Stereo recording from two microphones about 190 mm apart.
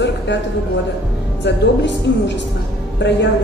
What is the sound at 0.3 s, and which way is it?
A woman's voice, 65° left (ahead or behind).